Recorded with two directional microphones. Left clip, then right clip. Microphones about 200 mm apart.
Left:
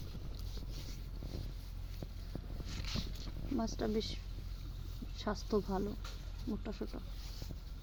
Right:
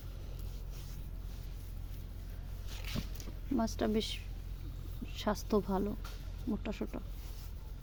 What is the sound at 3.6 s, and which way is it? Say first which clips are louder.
Speech: right 4 dB; 5° right (ahead or behind).